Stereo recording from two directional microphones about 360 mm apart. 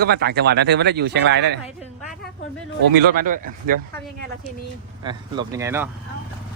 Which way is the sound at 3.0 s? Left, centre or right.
Right.